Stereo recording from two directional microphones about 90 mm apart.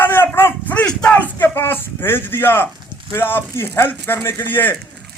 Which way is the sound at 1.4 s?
25° left (ahead or behind).